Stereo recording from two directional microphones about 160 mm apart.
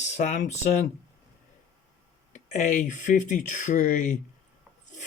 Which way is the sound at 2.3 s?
50° left (ahead or behind).